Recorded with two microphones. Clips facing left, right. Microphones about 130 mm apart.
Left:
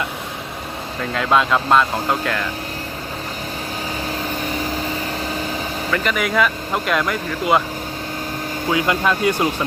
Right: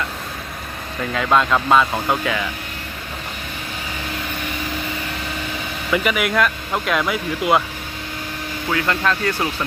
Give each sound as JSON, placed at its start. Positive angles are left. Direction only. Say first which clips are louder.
{"t": 1.1, "sound": "speech", "louder": "even", "side_deg": 0}
{"t": 4.1, "sound": "vehicle", "louder": "left 3 dB", "side_deg": 35}
{"t": 5.9, "sound": "speech", "louder": "right 2 dB", "side_deg": -10}
{"t": 8.7, "sound": "speech", "louder": "left 2 dB", "side_deg": 15}